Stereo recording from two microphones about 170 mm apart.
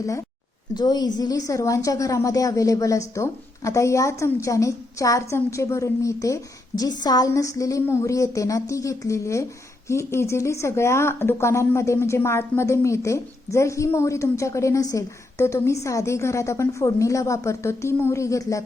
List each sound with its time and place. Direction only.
0.7 s a woman's voice: 25° left (ahead or behind)